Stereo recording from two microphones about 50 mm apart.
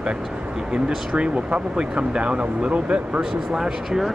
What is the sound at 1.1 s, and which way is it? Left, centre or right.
Speech, right.